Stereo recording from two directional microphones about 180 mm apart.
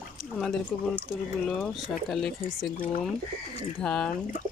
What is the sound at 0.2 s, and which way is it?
Speech, centre (ahead or behind).